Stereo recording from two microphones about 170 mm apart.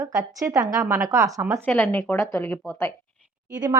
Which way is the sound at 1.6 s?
5° left (ahead or behind).